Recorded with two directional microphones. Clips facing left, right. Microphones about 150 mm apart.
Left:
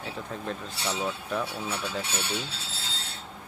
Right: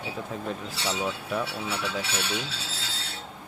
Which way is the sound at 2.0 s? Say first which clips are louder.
Right 1 dB; 90° right.